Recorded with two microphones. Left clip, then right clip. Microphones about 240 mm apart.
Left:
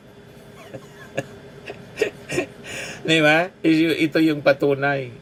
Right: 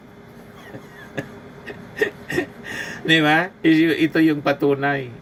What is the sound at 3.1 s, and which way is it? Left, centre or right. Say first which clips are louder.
Speech: even; centre.